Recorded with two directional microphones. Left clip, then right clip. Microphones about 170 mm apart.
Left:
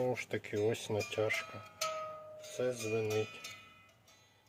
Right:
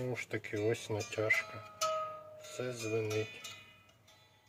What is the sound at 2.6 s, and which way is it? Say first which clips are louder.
Speech: left 2 dB; 35° left (ahead or behind).